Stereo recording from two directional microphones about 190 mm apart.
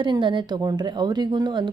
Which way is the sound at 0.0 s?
25° right (ahead or behind).